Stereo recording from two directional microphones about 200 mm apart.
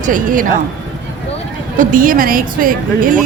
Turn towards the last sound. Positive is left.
turn(degrees=-40)  # may be behind; listen again after turning